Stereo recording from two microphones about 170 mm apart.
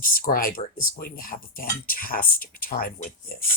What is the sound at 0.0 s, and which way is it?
Speech, 55° left (ahead or behind).